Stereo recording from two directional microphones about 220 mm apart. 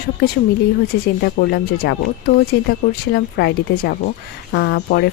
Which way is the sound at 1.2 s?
50° left (ahead or behind).